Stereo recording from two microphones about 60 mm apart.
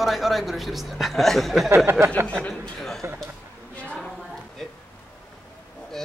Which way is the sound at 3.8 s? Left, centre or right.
Centre.